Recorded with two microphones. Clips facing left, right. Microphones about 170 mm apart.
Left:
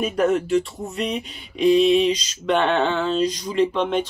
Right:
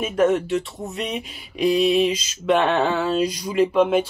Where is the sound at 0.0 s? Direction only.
Centre (ahead or behind).